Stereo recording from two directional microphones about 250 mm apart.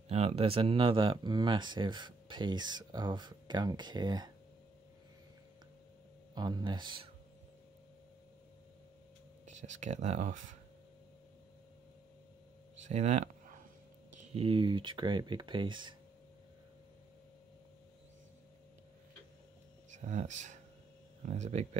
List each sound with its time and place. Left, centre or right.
0.1 s speech: right
6.3 s speech: centre
9.5 s speech: right
12.7 s a sound: right
14.1 s speech: right
19.9 s speech: right